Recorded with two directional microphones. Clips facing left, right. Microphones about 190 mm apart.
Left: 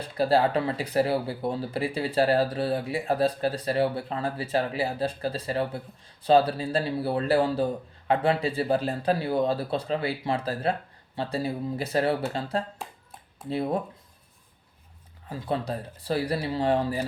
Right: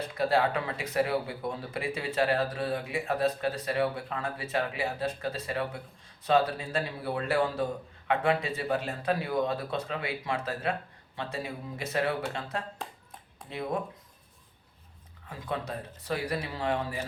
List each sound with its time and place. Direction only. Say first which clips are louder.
0.0 s a man's voice: left 4 dB; 30° left (ahead or behind)
15.3 s a man's voice: left 5 dB; 30° left (ahead or behind)